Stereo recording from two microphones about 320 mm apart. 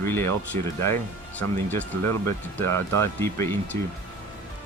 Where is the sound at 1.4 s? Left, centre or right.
Centre.